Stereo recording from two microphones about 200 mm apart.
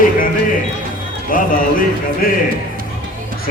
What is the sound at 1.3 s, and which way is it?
A man's voice, 45° left (ahead or behind).